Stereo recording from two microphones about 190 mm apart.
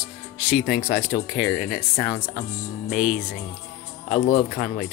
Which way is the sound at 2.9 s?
40° left (ahead or behind).